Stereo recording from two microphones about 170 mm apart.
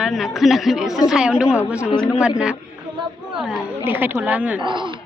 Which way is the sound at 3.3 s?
Centre (ahead or behind).